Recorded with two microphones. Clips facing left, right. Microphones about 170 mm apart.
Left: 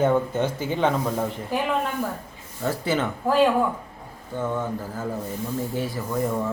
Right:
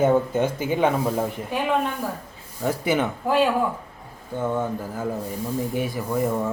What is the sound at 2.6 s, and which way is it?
Speech, 15° right (ahead or behind).